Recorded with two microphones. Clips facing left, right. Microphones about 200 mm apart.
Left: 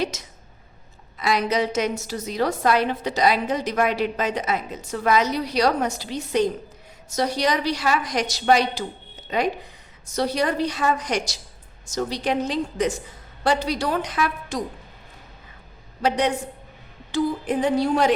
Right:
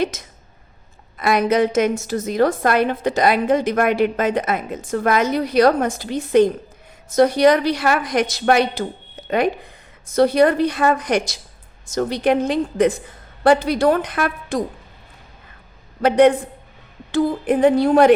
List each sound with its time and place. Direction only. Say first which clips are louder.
0.0 s a woman's voice: right 4 dB; 50° right (ahead or behind)
16.0 s a woman's voice: right 9 dB; 55° right (ahead or behind)